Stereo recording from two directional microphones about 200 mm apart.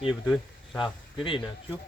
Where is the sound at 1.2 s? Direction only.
25° left (ahead or behind).